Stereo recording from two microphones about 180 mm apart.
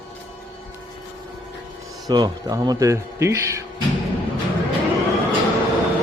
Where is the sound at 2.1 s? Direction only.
20° right (ahead or behind).